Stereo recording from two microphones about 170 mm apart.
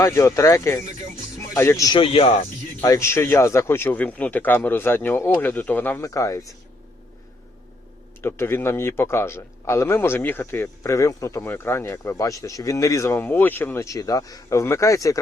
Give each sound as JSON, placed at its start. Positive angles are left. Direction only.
{"t": 0.0, "sound": "speech", "side_deg": 20}
{"t": 2.8, "sound": "speech", "side_deg": 20}
{"t": 8.2, "sound": "speech", "side_deg": 15}